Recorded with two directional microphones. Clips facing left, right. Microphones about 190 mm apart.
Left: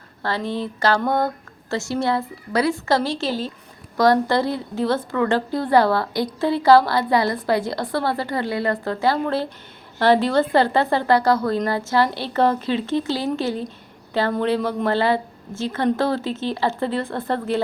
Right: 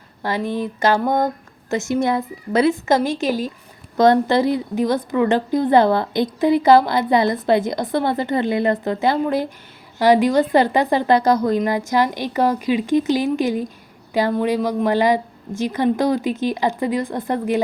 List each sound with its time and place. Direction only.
0.2 s a woman's voice: 15° right (ahead or behind)